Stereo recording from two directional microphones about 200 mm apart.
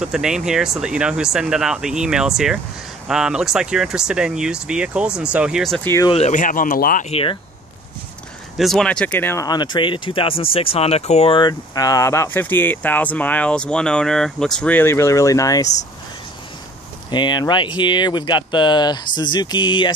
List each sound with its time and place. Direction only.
0.0 s speech: 5° right (ahead or behind)
6.0 s speech: 30° left (ahead or behind)
7.1 s speech: 30° left (ahead or behind)
8.5 s speech: centre (ahead or behind); by 15.7 s 15° left (ahead or behind)
17.1 s speech: 20° left (ahead or behind)